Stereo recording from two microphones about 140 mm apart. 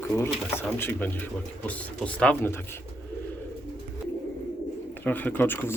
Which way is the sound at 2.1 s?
10° left (ahead or behind).